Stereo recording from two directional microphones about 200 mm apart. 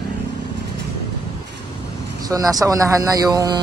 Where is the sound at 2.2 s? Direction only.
20° right (ahead or behind).